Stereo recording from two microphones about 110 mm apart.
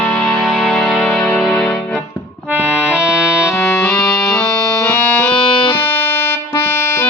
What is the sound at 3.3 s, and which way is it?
Music, 25° left (ahead or behind).